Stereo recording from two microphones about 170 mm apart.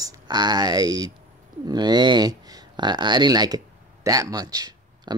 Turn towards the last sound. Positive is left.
turn(degrees=-20)  # may be behind; listen again after turning